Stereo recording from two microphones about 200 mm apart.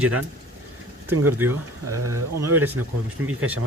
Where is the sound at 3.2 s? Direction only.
90° right.